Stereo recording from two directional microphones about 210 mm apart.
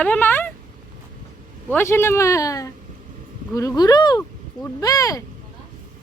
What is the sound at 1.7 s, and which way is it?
Speech, 10° left (ahead or behind).